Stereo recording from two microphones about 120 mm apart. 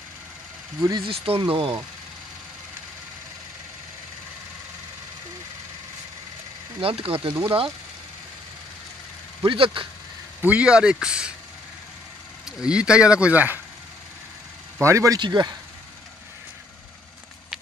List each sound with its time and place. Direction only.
0.7 s a man's voice: 25° right (ahead or behind)
1.0 s speech: 50° right (ahead or behind)
6.8 s speech: 50° right (ahead or behind)
9.4 s speech: 45° right (ahead or behind)
10.4 s speech: 10° right (ahead or behind)
12.4 s speech: 5° right (ahead or behind)
14.8 s a man's voice: 25° right (ahead or behind)
15.1 s speech: 40° right (ahead or behind)